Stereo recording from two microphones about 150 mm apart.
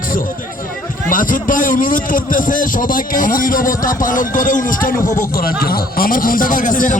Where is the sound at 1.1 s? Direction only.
65° left (ahead or behind).